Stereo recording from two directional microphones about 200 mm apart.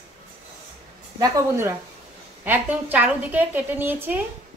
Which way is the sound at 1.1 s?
15° right (ahead or behind).